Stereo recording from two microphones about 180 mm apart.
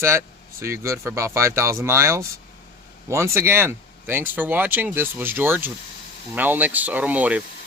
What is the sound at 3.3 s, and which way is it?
Speech, 15° right (ahead or behind).